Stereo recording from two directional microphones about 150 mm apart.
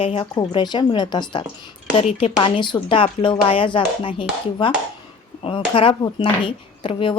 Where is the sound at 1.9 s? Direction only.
40° left (ahead or behind).